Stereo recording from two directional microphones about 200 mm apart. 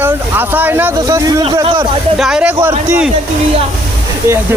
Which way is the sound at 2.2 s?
5° right (ahead or behind).